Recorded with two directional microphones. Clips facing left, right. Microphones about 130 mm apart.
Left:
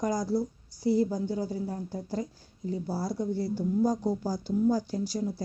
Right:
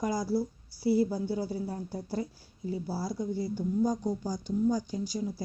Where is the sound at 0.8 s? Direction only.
10° right (ahead or behind).